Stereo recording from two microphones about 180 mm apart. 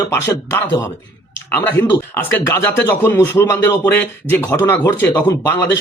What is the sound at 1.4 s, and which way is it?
Speech, 10° left (ahead or behind).